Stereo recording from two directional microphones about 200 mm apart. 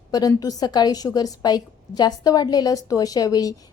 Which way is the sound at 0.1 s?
20° left (ahead or behind).